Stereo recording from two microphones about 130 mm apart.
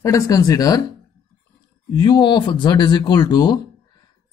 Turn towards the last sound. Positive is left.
turn(degrees=30)  # may be behind; listen again after turning